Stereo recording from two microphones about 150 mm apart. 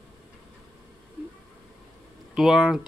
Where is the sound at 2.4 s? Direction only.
5° right (ahead or behind).